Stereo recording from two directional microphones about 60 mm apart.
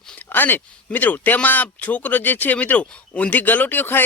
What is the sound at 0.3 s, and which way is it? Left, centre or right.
Speech, left.